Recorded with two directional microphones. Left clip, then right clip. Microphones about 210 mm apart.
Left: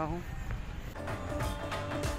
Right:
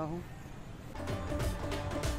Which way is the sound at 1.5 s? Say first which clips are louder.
Left 2 dB; centre (ahead or behind).